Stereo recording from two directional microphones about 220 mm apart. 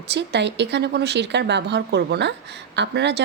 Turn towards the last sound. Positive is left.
turn(degrees=-50)  # may be behind; listen again after turning